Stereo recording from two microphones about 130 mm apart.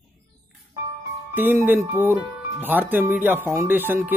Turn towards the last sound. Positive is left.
turn(degrees=-15)  # may be behind; listen again after turning